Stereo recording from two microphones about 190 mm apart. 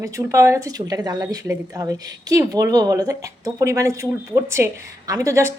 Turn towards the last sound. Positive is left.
turn(degrees=-15)  # may be behind; listen again after turning